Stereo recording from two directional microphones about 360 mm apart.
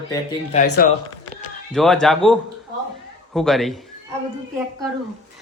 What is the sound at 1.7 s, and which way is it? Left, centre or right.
A man's voice, centre.